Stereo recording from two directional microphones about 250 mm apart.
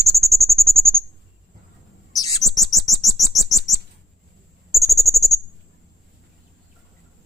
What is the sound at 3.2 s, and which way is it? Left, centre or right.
Bird, centre.